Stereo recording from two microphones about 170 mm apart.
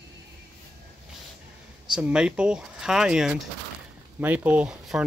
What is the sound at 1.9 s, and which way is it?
Speech, 5° right (ahead or behind).